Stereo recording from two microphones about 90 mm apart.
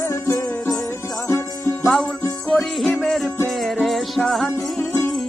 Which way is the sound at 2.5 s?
Centre (ahead or behind).